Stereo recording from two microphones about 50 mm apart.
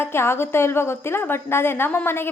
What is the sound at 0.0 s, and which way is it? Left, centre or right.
A woman's voice, left.